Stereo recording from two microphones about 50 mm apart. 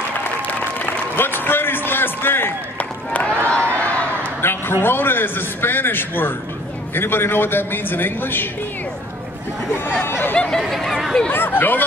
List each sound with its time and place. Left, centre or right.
0.5 s music: left
2.8 s run: left
3.4 s a sound: left
4.4 s a man's voice: left
9.9 s a man's voice: left
10.7 s speech: centre
11.3 s speech: left